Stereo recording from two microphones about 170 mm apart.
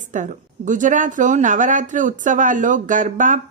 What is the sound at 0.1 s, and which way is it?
Speech, 50° right (ahead or behind).